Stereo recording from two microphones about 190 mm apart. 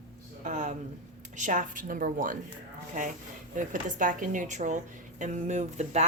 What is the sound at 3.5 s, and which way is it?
Speech, 45° right (ahead or behind).